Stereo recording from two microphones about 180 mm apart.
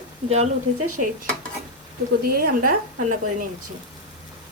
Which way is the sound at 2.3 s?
55° right (ahead or behind).